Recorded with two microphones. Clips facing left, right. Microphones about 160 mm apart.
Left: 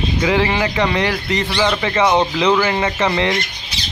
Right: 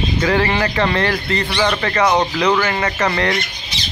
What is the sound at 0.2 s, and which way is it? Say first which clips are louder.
Speech: even; 15° left (ahead or behind).